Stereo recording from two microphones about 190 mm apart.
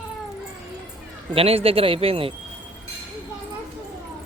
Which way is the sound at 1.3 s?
30° right (ahead or behind).